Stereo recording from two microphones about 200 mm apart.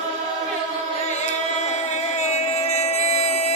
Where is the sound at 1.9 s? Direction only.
35° left (ahead or behind).